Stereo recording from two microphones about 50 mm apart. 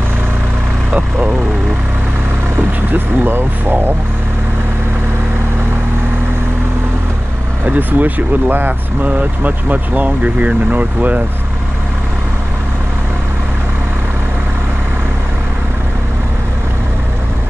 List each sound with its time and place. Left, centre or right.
2.9 s speech: right
7.6 s speech: right